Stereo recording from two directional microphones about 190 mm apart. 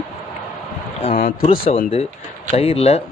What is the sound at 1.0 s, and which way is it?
Speech, 45° left (ahead or behind).